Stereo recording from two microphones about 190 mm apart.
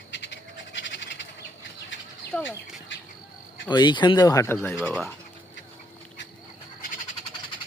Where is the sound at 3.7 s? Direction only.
25° left (ahead or behind); by 5.1 s 5° left (ahead or behind).